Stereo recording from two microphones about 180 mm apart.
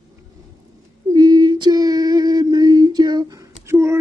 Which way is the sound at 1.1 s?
25° right (ahead or behind).